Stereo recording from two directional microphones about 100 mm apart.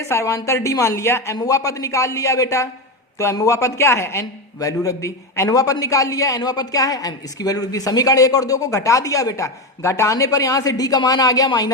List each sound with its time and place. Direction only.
0.0 s a woman's voice: 30° left (ahead or behind)